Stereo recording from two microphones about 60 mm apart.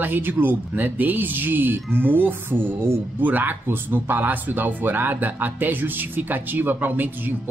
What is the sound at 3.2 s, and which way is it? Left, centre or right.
Speech, right.